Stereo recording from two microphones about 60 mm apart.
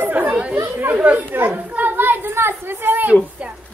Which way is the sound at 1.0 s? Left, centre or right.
Right.